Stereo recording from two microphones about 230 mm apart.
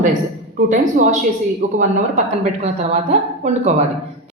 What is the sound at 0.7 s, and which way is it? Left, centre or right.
Speech, right.